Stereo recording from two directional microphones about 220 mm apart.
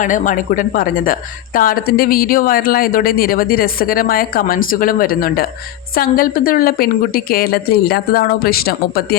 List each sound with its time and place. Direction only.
0.0 s a woman's voice: 35° left (ahead or behind)